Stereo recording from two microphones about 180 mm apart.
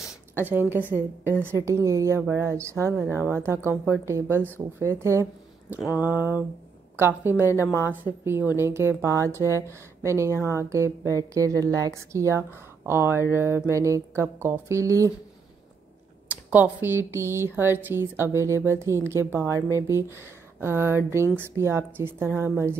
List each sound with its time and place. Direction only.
0.0 s a sound: 10° right (ahead or behind)
1.4 s speech: 15° right (ahead or behind)
5.9 s speech: 10° right (ahead or behind)
7.5 s a woman's voice: 15° left (ahead or behind)
7.9 s speech: 10° right (ahead or behind)
16.4 s speech: 10° right (ahead or behind)